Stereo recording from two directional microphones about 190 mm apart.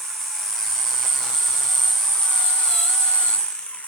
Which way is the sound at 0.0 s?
Centre (ahead or behind).